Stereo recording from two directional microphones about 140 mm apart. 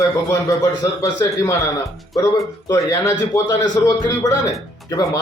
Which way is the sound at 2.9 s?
20° left (ahead or behind).